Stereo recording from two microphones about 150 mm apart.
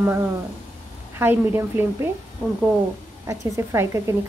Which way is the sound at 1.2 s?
15° right (ahead or behind).